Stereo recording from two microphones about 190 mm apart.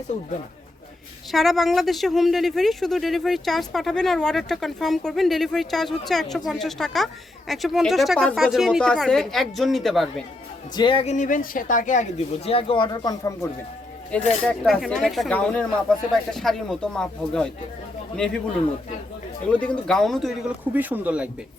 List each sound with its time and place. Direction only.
1.3 s speech: centre (ahead or behind)
10.8 s speech: 25° left (ahead or behind)
14.1 s speech: 5° left (ahead or behind)
19.5 s speech: 5° left (ahead or behind)
20.7 s speech: 10° right (ahead or behind)